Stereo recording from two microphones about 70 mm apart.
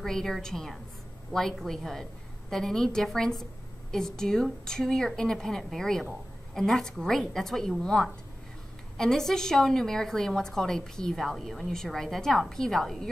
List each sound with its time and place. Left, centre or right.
0.0 s a woman's voice: centre